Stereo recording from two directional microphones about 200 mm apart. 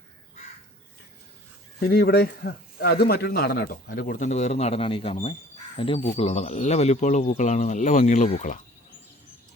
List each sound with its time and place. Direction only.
1.8 s a man's voice: 50° left (ahead or behind)